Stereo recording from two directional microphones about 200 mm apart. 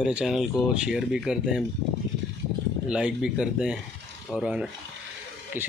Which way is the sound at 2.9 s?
5° right (ahead or behind).